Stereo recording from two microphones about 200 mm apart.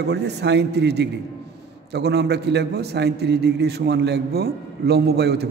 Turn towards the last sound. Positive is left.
turn(degrees=-55)  # may be behind; listen again after turning